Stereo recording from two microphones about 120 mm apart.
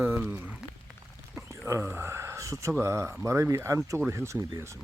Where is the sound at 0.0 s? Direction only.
20° right (ahead or behind).